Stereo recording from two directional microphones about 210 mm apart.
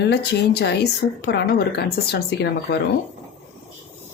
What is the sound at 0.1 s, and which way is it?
Speech, 55° left (ahead or behind).